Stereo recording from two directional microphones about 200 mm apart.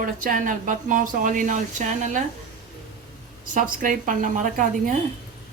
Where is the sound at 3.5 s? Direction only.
40° right (ahead or behind).